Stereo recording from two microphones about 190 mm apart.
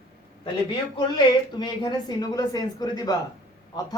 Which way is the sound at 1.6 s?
20° left (ahead or behind).